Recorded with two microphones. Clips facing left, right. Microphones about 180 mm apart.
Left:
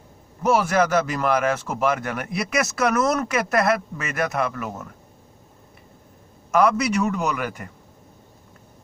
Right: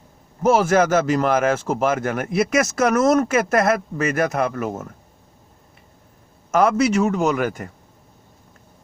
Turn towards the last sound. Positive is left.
turn(degrees=-45)  # may be behind; listen again after turning